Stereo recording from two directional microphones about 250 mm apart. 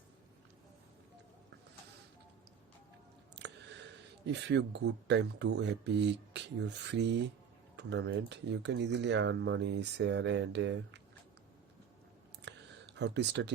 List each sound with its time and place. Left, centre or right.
3.3 s chewing: right
4.3 s speech: right
12.4 s a sound: right